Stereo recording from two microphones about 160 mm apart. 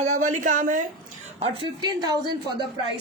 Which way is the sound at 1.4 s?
30° right (ahead or behind).